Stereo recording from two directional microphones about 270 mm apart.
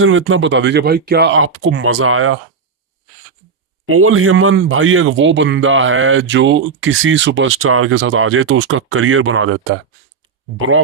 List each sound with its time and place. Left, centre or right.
0.0 s a man's voice: right
3.8 s a man's voice: right